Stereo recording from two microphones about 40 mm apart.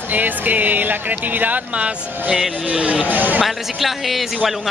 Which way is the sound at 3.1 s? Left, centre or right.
Right.